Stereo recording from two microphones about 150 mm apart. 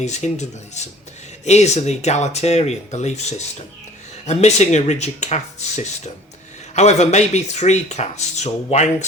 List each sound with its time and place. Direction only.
0.0 s speech: 50° left (ahead or behind)